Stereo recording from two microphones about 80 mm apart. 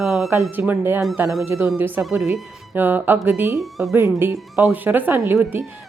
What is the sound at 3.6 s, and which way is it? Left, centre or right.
Speech, centre.